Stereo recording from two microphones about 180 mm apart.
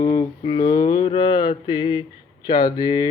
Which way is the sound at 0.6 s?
50° left (ahead or behind).